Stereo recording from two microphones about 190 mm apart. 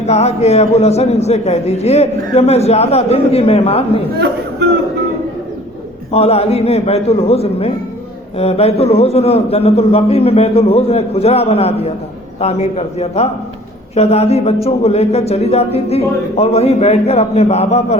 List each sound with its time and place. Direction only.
0.0 s a man's voice: 35° left (ahead or behind)
6.1 s a man's voice: 30° left (ahead or behind)